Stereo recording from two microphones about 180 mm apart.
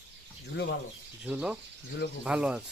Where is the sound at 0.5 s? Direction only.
75° left (ahead or behind).